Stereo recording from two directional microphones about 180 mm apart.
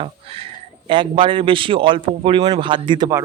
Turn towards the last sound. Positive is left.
turn(degrees=-25)  # may be behind; listen again after turning